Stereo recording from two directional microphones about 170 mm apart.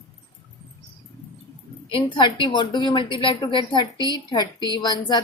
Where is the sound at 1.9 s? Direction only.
30° left (ahead or behind).